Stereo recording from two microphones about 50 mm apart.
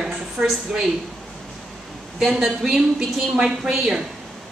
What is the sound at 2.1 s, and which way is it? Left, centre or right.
A woman's voice, centre.